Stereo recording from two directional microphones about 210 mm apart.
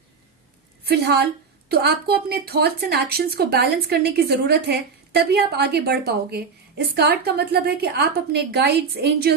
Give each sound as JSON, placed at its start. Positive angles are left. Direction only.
{"t": 0.9, "sound": "speech", "side_deg": -50}